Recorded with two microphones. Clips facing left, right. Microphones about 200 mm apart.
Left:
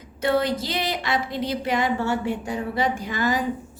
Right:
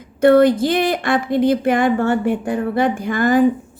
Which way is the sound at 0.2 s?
55° right (ahead or behind).